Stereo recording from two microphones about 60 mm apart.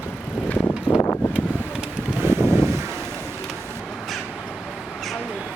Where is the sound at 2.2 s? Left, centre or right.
Right.